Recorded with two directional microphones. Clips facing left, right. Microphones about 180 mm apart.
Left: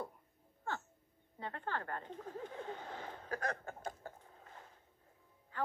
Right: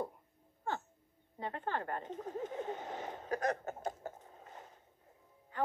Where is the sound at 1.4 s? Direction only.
20° right (ahead or behind).